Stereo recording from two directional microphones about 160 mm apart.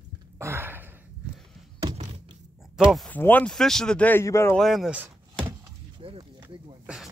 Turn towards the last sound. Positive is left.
turn(degrees=-5)  # may be behind; listen again after turning